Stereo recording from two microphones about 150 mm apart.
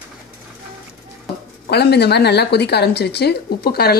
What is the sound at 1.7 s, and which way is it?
A woman's voice, 90° left.